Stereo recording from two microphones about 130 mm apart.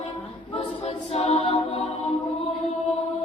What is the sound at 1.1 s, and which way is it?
A capella, 50° left (ahead or behind).